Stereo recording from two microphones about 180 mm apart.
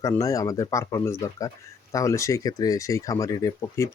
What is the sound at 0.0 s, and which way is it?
Speech, 20° left (ahead or behind).